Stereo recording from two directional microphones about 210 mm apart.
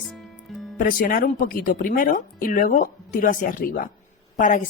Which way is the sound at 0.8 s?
40° left (ahead or behind).